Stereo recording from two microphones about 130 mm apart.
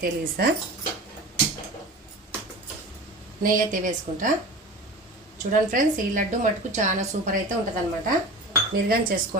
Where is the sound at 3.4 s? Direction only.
90° right.